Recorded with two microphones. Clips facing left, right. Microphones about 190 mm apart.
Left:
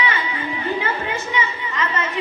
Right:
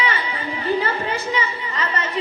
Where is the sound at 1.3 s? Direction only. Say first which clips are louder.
Even; 35° right (ahead or behind).